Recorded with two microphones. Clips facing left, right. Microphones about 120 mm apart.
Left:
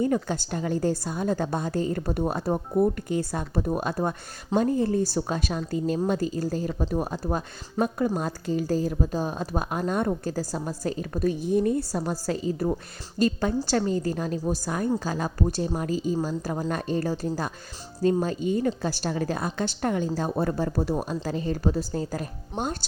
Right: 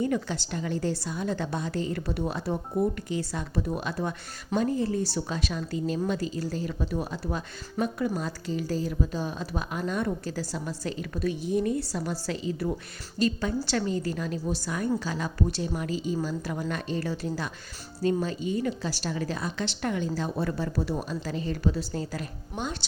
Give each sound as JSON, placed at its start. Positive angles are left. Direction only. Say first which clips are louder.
{"t": 0.0, "sound": "a woman's voice", "louder": "left 3 dB", "side_deg": 45}